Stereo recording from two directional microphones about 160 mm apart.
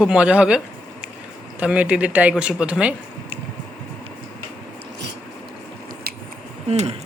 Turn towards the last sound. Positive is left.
turn(degrees=-40)  # may be behind; listen again after turning